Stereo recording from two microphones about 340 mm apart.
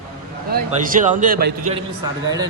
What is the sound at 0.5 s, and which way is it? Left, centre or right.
Speech, right.